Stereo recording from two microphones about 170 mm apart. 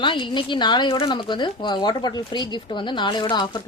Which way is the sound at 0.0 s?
30° left (ahead or behind).